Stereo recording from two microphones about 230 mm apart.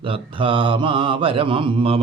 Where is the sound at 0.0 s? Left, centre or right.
Right.